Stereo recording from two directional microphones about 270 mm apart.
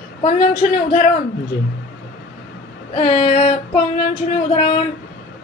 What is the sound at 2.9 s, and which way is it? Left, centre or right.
Speech, left.